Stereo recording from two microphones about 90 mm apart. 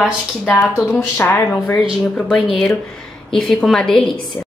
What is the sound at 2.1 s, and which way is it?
A woman's voice, 5° left (ahead or behind).